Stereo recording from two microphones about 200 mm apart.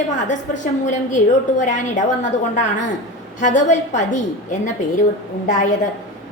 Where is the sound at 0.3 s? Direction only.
40° left (ahead or behind).